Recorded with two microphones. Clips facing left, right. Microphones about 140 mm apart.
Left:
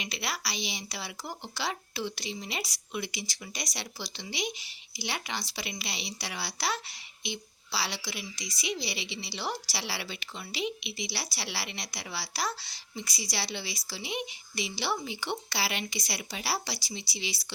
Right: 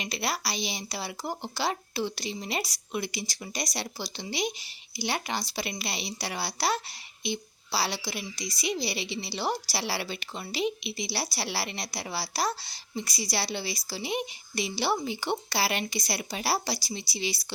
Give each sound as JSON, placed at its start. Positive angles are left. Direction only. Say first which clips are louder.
{"t": 0.0, "sound": "a woman's voice", "louder": "right 4 dB", "side_deg": -40}